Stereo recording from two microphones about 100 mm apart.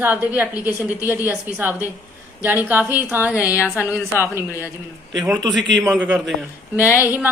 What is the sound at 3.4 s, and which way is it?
Speech, 30° left (ahead or behind).